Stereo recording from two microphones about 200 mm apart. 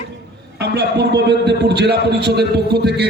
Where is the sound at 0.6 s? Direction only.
55° right (ahead or behind).